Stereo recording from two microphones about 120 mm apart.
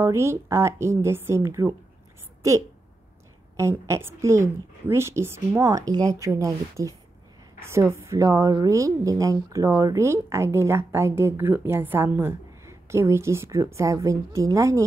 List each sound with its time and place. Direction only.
0.0 s a woman's voice: 20° right (ahead or behind)